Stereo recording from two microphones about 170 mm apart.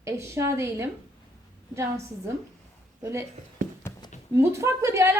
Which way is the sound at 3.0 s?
20° right (ahead or behind).